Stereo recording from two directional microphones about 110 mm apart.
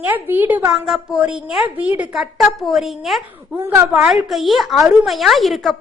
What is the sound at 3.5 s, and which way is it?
Speech, 20° right (ahead or behind).